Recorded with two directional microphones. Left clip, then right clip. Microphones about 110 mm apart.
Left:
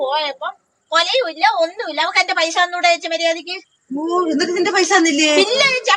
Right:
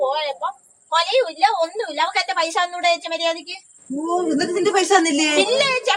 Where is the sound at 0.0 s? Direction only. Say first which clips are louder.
Left 2 dB; 25° right (ahead or behind).